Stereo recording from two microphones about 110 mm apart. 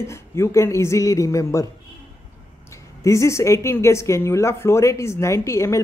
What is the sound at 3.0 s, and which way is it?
A woman's voice, 25° left (ahead or behind).